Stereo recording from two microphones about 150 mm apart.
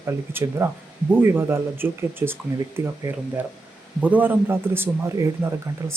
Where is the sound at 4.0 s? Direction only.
10° right (ahead or behind).